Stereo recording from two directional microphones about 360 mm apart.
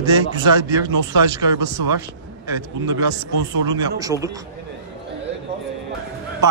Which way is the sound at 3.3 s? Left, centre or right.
Right.